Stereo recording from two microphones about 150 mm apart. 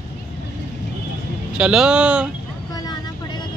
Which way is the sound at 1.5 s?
5° right (ahead or behind).